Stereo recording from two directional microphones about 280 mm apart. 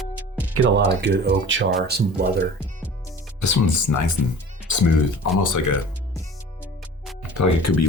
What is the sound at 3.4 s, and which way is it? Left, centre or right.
Speech, left.